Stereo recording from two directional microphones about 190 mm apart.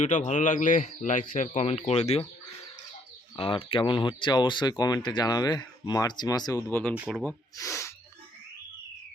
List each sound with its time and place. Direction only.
0.0 s a man's voice: 40° left (ahead or behind)
3.3 s speech: 30° left (ahead or behind); by 7.3 s 5° left (ahead or behind)
7.5 s speech: 15° left (ahead or behind)